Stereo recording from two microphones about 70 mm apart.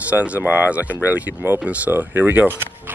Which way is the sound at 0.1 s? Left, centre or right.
Centre.